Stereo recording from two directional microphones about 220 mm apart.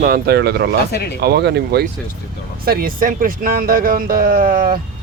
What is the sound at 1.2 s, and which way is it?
A man's voice, 50° right (ahead or behind).